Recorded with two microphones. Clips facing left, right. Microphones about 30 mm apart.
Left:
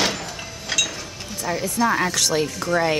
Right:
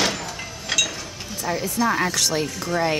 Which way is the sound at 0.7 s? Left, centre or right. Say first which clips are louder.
Right 1 dB; centre.